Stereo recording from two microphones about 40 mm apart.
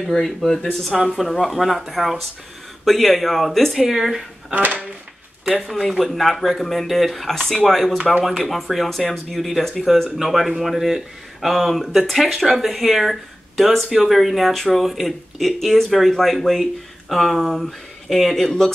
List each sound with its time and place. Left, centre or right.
0.7 s speech: centre
4.6 s speech: right
5.6 s speech: centre
7.2 s speech: centre